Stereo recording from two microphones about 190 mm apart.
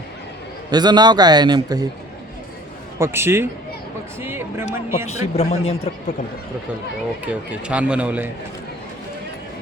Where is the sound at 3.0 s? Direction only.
15° right (ahead or behind).